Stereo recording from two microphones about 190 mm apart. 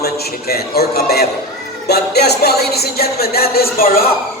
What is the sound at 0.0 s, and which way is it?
Music, 55° left (ahead or behind).